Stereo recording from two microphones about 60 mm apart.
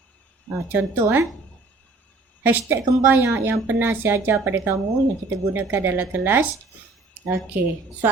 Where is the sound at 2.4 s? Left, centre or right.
Right.